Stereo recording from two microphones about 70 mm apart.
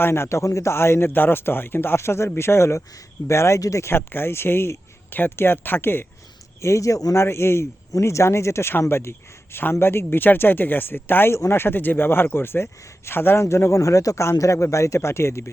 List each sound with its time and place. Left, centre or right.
0.0 s speech: left
3.9 s speech: left
6.6 s speech: left
7.2 s speech: left